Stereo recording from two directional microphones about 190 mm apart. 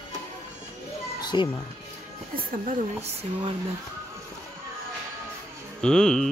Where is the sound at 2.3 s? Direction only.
50° right (ahead or behind).